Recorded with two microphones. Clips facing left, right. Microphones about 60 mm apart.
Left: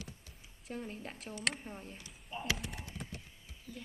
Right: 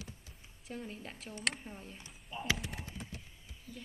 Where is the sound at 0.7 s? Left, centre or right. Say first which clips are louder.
Left 1 dB; centre.